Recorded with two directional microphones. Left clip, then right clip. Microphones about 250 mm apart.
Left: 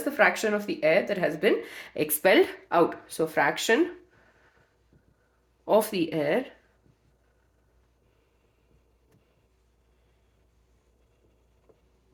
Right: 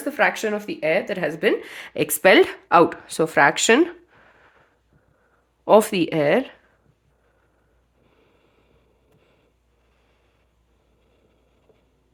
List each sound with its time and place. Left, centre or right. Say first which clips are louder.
0.0 s speech: right 2 dB; right
5.6 s speech: right 8 dB; right